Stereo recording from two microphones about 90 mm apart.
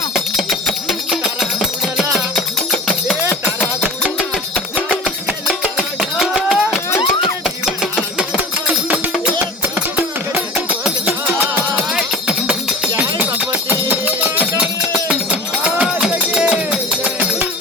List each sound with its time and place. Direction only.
0.9 s music: 5° right (ahead or behind)
3.2 s music: 20° left (ahead or behind)
5.0 s music: 10° right (ahead or behind)
11.9 s music: 10° right (ahead or behind)